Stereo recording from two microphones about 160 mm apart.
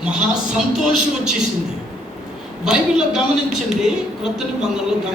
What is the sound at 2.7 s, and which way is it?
Speech, 5° right (ahead or behind).